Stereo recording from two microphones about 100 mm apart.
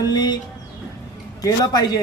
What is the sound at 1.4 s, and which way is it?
Speech, 45° left (ahead or behind).